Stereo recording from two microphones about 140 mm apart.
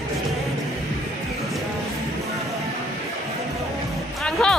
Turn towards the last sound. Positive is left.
turn(degrees=5)  # may be behind; listen again after turning